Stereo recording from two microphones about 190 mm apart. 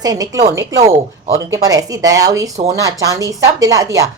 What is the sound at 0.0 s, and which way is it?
Speech, 20° right (ahead or behind).